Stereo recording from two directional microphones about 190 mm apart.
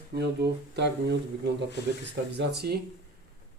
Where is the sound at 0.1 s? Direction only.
60° right (ahead or behind).